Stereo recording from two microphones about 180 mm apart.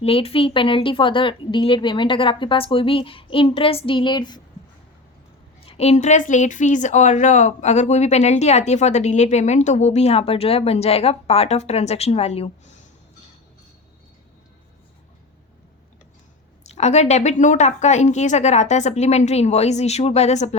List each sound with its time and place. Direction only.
0.0 s a woman's voice: 35° left (ahead or behind)
5.6 s a woman's voice: 35° left (ahead or behind)
16.6 s a woman's voice: 40° left (ahead or behind)